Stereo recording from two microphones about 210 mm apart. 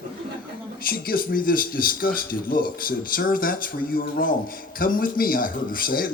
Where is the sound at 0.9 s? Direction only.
45° left (ahead or behind).